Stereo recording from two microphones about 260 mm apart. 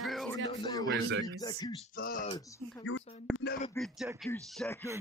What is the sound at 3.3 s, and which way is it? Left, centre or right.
Speech, left.